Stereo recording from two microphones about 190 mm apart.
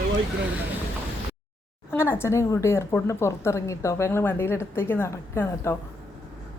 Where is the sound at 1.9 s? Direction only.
15° left (ahead or behind).